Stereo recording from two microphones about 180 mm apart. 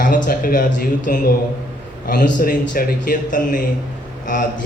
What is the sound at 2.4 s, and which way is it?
Speech, 50° left (ahead or behind).